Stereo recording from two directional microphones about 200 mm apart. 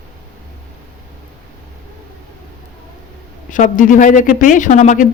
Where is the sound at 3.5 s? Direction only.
40° left (ahead or behind).